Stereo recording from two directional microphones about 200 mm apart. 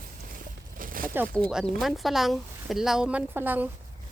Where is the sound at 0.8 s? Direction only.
45° right (ahead or behind).